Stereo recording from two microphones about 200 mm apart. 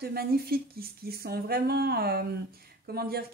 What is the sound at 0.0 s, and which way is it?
Speech, 50° right (ahead or behind).